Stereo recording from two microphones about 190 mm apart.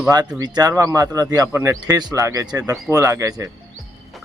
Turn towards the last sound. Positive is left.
turn(degrees=-15)  # may be behind; listen again after turning